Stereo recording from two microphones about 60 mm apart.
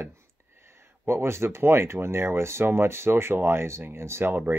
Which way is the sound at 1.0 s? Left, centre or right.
Right.